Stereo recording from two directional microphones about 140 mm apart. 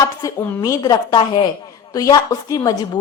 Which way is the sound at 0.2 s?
25° left (ahead or behind).